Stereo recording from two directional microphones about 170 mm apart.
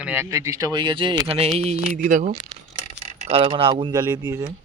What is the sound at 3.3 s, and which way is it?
Speech, 35° right (ahead or behind).